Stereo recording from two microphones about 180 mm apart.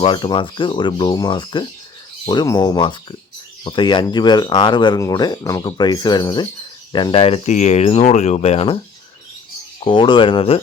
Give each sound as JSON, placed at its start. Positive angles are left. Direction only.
{"t": 0.0, "sound": "speech", "side_deg": 25}
{"t": 9.8, "sound": "speech", "side_deg": 25}